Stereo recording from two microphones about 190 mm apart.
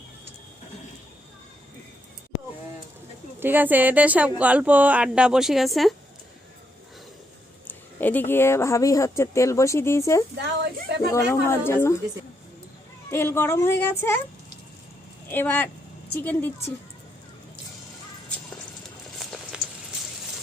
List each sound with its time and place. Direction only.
3.4 s a woman's voice: 10° right (ahead or behind)
7.7 s speech: 10° left (ahead or behind)
10.3 s a woman's voice: 60° right (ahead or behind)
11.1 s speech: 15° left (ahead or behind)
13.1 s speech: 10° left (ahead or behind)
15.3 s speech: 10° left (ahead or behind)
19.2 s a sound: centre (ahead or behind)